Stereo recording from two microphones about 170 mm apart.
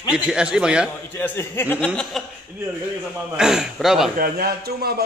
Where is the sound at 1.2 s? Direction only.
15° left (ahead or behind).